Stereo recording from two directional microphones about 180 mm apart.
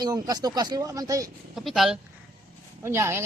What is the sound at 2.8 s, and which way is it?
Speech, 15° right (ahead or behind).